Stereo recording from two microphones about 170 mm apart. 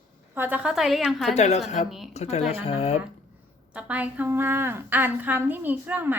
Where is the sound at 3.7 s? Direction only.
10° right (ahead or behind).